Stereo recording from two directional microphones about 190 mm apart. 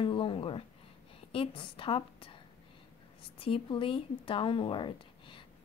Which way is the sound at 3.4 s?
25° left (ahead or behind).